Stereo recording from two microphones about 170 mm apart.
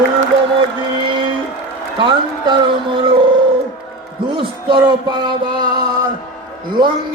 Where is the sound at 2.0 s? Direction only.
30° right (ahead or behind).